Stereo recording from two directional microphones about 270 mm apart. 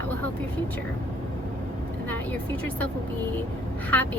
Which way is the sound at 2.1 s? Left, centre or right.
Centre.